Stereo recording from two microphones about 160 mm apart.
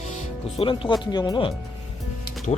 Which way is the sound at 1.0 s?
25° left (ahead or behind).